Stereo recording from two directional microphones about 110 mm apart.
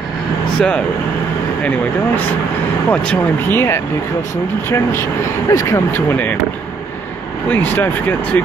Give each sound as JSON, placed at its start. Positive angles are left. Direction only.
{"t": 0.6, "sound": "speech", "side_deg": 10}
{"t": 5.9, "sound": "speech", "side_deg": 15}
{"t": 7.4, "sound": "speech", "side_deg": 15}